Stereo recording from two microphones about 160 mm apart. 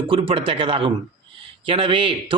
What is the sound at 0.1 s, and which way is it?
A man's voice, 35° right (ahead or behind).